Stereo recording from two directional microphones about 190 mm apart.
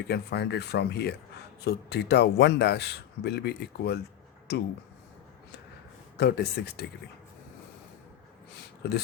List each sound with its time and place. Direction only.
0.1 s speech: 60° left (ahead or behind)
6.1 s speech: 60° left (ahead or behind)